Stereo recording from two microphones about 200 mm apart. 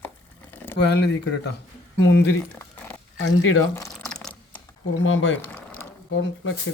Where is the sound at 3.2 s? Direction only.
80° left.